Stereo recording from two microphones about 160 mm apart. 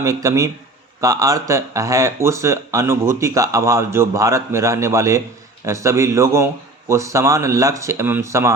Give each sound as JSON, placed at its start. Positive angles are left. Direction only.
{"t": 0.0, "sound": "speech", "side_deg": -20}